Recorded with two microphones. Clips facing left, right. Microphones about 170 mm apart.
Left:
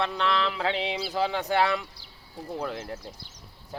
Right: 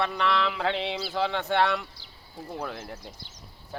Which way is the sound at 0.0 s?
Centre (ahead or behind).